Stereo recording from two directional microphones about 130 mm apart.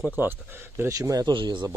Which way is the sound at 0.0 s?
15° right (ahead or behind).